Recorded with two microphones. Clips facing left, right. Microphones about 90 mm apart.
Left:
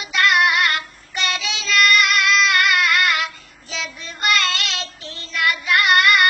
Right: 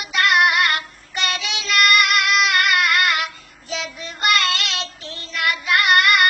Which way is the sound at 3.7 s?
5° right (ahead or behind).